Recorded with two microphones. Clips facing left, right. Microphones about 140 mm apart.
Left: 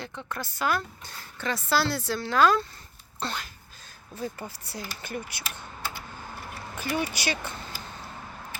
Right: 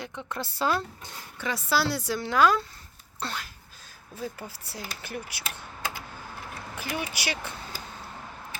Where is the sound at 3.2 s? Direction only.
5° right (ahead or behind).